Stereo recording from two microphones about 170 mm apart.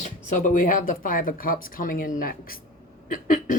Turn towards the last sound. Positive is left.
turn(degrees=50)  # may be behind; listen again after turning